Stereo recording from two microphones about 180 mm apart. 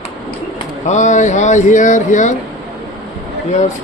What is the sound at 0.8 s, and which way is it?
Speech, 40° left (ahead or behind).